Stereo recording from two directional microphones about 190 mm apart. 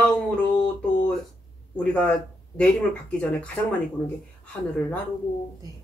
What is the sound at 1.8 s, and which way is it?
Speech, 5° left (ahead or behind).